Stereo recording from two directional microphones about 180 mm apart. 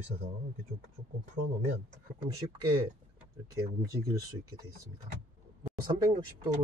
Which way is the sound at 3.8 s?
20° right (ahead or behind).